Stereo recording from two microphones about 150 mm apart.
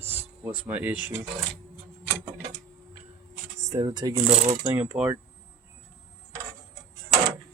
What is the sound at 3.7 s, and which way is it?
Speech, 25° right (ahead or behind).